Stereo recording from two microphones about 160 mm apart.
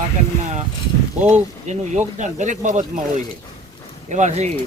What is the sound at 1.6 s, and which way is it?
Speech, 45° right (ahead or behind).